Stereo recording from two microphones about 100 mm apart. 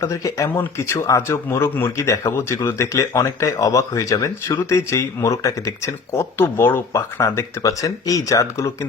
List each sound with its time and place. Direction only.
0.0 s speech: 30° left (ahead or behind)